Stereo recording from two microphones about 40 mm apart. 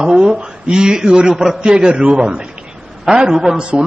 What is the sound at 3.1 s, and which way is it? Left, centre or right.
Speech, centre.